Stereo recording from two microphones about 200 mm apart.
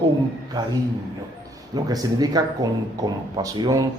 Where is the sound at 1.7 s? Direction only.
20° right (ahead or behind).